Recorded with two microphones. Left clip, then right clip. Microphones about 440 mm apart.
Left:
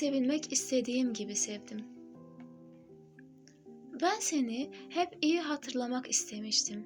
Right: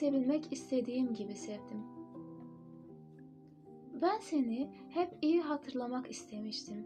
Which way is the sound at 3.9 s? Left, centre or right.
Left.